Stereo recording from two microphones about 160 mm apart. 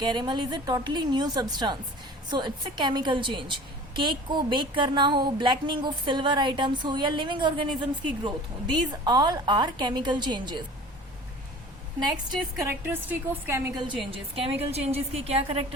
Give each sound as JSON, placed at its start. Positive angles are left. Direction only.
{"t": 0.0, "sound": "speech", "side_deg": -30}
{"t": 12.5, "sound": "a woman's voice", "side_deg": -10}
{"t": 13.7, "sound": "a woman's voice", "side_deg": -30}